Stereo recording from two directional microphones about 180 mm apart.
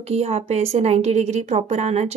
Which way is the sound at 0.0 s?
35° right (ahead or behind).